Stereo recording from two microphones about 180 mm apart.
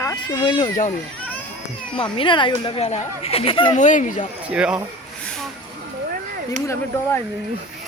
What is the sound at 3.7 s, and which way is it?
Speech, 45° left (ahead or behind).